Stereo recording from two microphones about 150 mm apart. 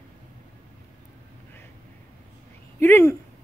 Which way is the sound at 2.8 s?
15° left (ahead or behind).